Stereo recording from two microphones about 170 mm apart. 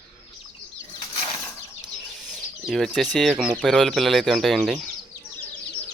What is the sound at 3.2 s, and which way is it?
Speech, centre (ahead or behind).